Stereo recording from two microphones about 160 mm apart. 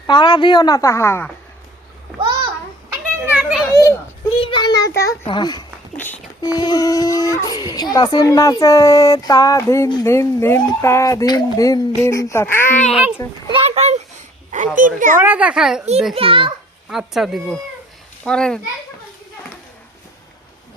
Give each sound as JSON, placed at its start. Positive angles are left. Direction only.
{"t": 0.1, "sound": "speech", "side_deg": 30}
{"t": 2.9, "sound": "children playing", "side_deg": -5}
{"t": 3.7, "sound": "children playing", "side_deg": 20}
{"t": 4.4, "sound": "child singing", "side_deg": 25}
{"t": 5.3, "sound": "speech", "side_deg": 25}
{"t": 12.9, "sound": "speech", "side_deg": -5}
{"t": 13.5, "sound": "a child's voice", "side_deg": -40}
{"t": 14.8, "sound": "speech", "side_deg": -55}
{"t": 15.2, "sound": "a child's voice", "side_deg": -10}
{"t": 16.1, "sound": "a child's voice", "side_deg": -35}
{"t": 16.9, "sound": "speech", "side_deg": -5}